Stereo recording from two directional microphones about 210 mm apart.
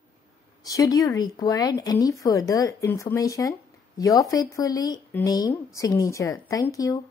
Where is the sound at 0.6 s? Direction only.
15° left (ahead or behind).